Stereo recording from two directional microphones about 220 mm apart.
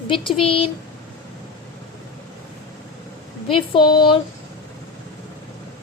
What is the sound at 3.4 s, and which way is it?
Speech, 25° left (ahead or behind).